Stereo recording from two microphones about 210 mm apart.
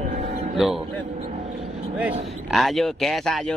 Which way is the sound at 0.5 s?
Centre (ahead or behind).